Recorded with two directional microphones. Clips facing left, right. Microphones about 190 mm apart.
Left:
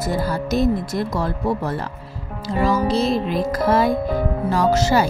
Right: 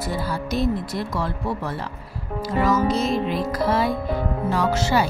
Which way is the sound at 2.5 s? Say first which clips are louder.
Left 1 dB; 30° left (ahead or behind).